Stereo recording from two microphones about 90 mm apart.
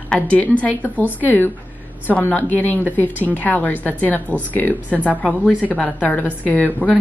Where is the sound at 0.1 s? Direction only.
15° left (ahead or behind).